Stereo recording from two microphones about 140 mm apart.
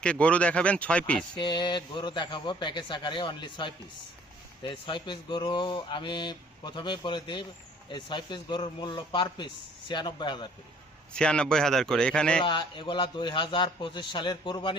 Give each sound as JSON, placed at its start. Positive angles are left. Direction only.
{"t": 0.0, "sound": "speech", "side_deg": 10}
{"t": 1.4, "sound": "speech", "side_deg": 35}
{"t": 11.1, "sound": "speech", "side_deg": 5}
{"t": 12.4, "sound": "speech", "side_deg": 35}